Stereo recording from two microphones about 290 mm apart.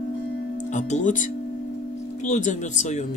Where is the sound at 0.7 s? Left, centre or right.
Left.